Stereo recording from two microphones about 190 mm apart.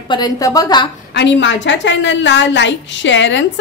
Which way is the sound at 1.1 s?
65° left (ahead or behind).